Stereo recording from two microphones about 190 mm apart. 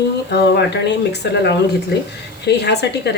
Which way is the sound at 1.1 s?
65° left (ahead or behind).